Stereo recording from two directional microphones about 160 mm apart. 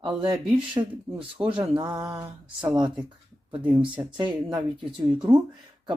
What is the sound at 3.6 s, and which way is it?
Speech, 10° right (ahead or behind).